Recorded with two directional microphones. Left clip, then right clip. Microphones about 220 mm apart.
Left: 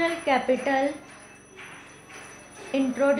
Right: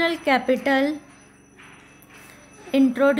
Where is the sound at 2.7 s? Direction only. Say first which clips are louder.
Right 5 dB; 45° right (ahead or behind).